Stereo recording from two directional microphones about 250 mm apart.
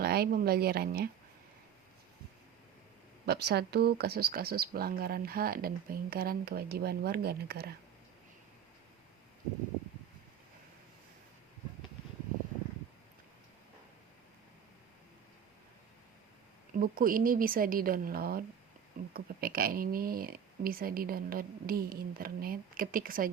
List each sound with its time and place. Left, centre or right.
0.0 s speech: right
3.2 s speech: right
16.7 s speech: right